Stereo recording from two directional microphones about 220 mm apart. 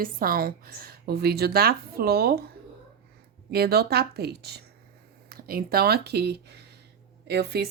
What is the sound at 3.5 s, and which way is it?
Speech, 45° right (ahead or behind).